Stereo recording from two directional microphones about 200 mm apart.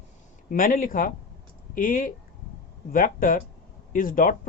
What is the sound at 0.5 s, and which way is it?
A man's voice, 45° left (ahead or behind).